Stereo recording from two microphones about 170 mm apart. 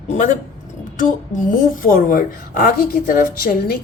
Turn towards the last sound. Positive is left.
turn(degrees=60)  # may be behind; listen again after turning